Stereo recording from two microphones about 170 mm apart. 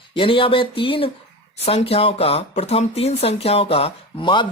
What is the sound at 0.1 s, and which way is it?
Speech, 30° left (ahead or behind).